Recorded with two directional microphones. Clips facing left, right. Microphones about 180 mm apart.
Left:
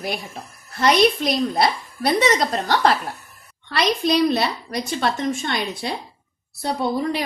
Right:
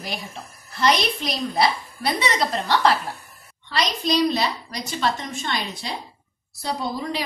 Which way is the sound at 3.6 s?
60° left (ahead or behind).